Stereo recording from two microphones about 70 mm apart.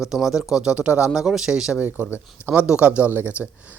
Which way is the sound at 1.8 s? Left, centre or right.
Right.